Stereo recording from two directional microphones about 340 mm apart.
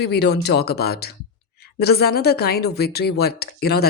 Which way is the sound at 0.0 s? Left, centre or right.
Left.